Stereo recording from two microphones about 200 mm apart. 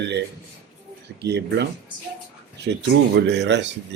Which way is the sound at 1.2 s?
55° right (ahead or behind).